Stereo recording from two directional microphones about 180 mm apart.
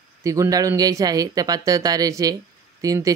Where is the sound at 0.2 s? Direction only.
20° right (ahead or behind).